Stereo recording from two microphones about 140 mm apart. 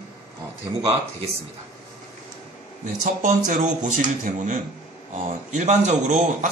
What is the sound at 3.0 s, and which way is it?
A man's voice, 65° right (ahead or behind).